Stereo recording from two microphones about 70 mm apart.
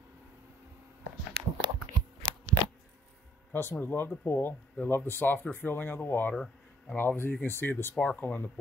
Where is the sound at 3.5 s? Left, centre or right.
Left.